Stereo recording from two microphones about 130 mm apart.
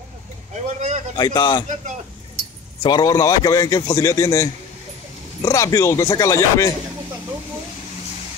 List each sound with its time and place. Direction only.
0.5 s speech: 65° right (ahead or behind)
1.1 s a man's voice: 35° left (ahead or behind)
2.8 s a man's voice: 30° left (ahead or behind)